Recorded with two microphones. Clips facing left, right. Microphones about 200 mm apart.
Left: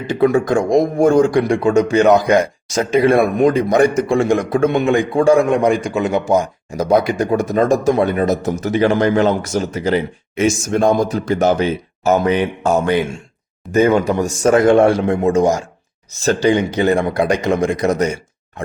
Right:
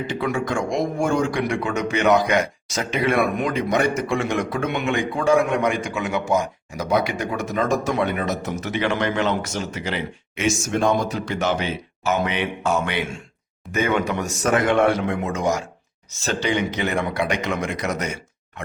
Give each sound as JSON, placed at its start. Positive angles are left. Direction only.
{"t": 0.1, "sound": "speech", "side_deg": 40}